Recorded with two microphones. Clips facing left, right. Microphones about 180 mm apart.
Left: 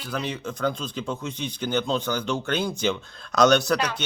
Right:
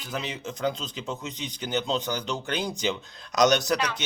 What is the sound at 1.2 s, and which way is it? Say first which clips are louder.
Speech: left 4 dB; 55° left (ahead or behind).